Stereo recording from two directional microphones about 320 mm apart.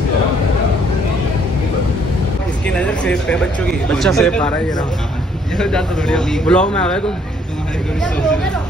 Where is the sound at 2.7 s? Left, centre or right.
Centre.